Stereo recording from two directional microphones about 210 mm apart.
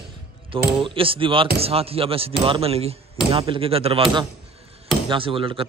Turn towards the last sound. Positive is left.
turn(degrees=-25)  # may be behind; listen again after turning